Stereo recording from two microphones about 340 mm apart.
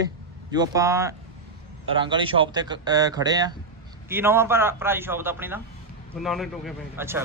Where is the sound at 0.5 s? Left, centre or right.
Centre.